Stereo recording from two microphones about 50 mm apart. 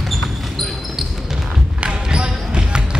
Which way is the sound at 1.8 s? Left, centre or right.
Centre.